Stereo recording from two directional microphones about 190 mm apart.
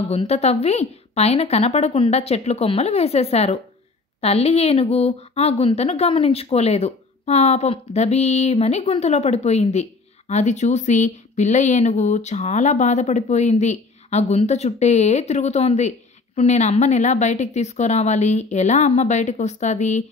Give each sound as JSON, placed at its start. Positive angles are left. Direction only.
{"t": 0.1, "sound": "speech", "side_deg": 35}